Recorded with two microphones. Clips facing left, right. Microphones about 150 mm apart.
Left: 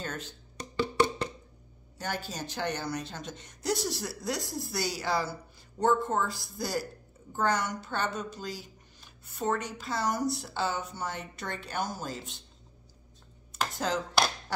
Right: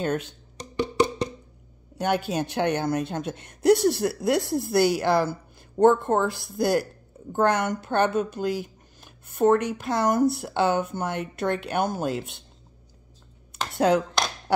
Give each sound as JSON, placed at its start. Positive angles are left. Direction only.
{"t": 0.0, "sound": "speech", "side_deg": -65}
{"t": 0.7, "sound": "wood block", "side_deg": -15}
{"t": 2.0, "sound": "speech", "side_deg": -65}
{"t": 13.7, "sound": "speech", "side_deg": -60}